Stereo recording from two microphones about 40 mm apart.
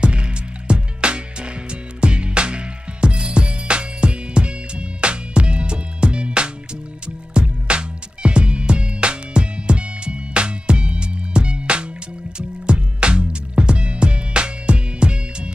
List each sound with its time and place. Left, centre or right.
0.0 s music: right